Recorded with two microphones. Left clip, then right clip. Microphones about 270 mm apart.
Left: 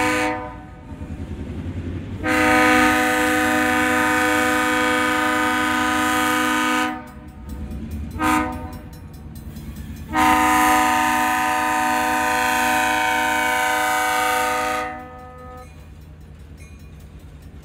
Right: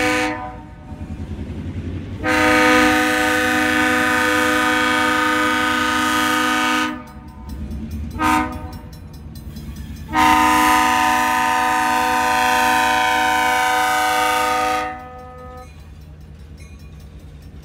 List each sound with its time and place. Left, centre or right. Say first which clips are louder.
0.0 s vehicle: right 1 dB; centre
2.2 s vehicle horn: right 2 dB; centre
8.1 s train: right 2 dB; centre
9.7 s train: right 2 dB; centre